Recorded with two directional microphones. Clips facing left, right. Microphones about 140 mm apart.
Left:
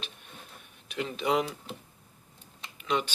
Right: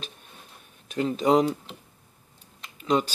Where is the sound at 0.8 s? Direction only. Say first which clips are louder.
Right 7 dB; 40° right (ahead or behind).